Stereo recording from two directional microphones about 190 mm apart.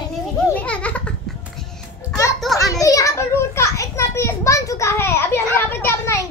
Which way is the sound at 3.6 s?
15° left (ahead or behind).